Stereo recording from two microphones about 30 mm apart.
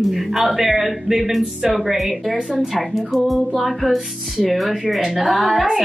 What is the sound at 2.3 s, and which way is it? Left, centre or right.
Speech, right.